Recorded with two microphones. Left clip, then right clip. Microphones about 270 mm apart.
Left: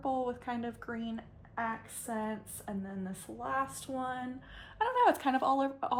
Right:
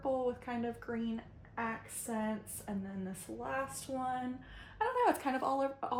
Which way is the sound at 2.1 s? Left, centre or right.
Centre.